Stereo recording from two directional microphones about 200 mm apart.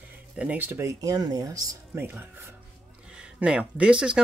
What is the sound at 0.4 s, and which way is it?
Speech, 10° right (ahead or behind).